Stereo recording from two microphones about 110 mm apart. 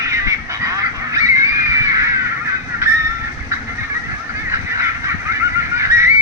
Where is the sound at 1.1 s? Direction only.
30° right (ahead or behind).